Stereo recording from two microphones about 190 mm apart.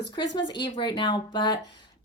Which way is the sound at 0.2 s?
25° left (ahead or behind).